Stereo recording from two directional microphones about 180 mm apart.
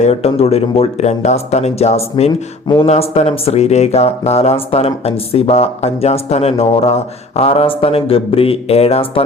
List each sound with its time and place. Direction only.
0.0 s speech: 35° left (ahead or behind)